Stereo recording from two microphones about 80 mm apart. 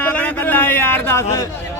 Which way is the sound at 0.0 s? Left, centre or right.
Centre.